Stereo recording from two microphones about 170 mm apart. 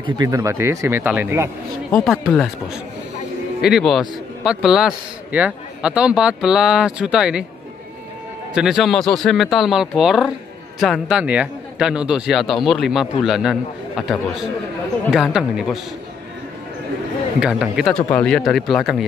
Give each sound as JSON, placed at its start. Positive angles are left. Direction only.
{"t": 0.0, "sound": "speech", "side_deg": -20}
{"t": 1.9, "sound": "a man's voice", "side_deg": 0}
{"t": 8.5, "sound": "a man's voice", "side_deg": -5}
{"t": 17.4, "sound": "a man's voice", "side_deg": -5}